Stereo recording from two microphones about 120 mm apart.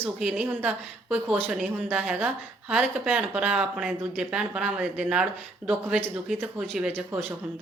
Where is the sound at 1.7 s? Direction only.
10° right (ahead or behind).